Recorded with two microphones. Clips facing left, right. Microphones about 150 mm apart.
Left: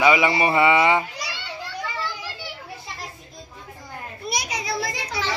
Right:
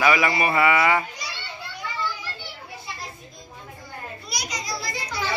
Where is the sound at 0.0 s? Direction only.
20° left (ahead or behind).